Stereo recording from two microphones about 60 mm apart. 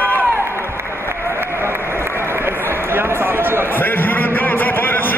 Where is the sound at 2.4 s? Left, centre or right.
Right.